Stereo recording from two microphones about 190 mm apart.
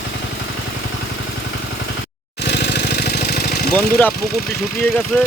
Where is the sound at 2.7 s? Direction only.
60° left (ahead or behind).